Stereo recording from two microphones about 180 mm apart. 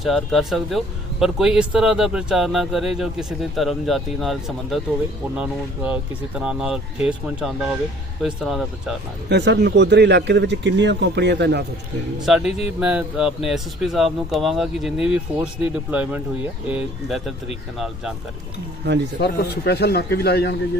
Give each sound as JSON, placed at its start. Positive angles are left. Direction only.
{"t": 0.0, "sound": "speech", "side_deg": 0}
{"t": 9.3, "sound": "speech", "side_deg": -80}
{"t": 12.2, "sound": "speech", "side_deg": 0}
{"t": 19.2, "sound": "a man's voice", "side_deg": 65}